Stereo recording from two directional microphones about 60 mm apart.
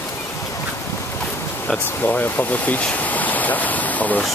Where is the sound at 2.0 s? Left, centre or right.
Left.